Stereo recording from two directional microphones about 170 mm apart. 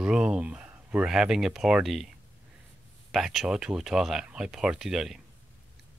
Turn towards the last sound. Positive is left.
turn(degrees=0)  # may be behind; listen again after turning